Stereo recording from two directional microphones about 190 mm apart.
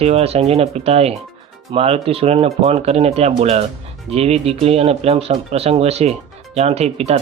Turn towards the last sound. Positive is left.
turn(degrees=-35)  # may be behind; listen again after turning